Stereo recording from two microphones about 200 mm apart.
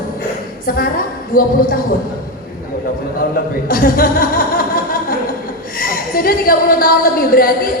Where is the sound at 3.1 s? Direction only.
45° left (ahead or behind).